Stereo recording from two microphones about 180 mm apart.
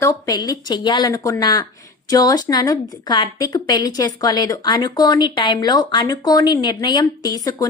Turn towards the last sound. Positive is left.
turn(degrees=20)  # may be behind; listen again after turning